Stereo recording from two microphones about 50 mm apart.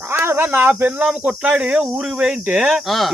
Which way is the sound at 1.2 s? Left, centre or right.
Right.